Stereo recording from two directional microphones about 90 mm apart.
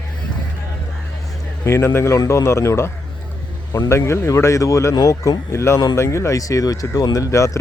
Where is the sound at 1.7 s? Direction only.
30° left (ahead or behind).